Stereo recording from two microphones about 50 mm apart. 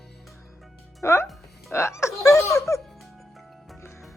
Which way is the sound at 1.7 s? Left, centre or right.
Left.